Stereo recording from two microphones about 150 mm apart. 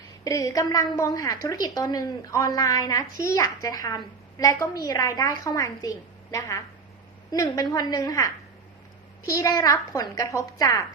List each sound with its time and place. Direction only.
0.3 s a woman's voice: 25° left (ahead or behind)